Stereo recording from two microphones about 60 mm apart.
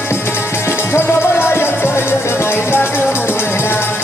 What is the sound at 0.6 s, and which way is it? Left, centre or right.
Music, left.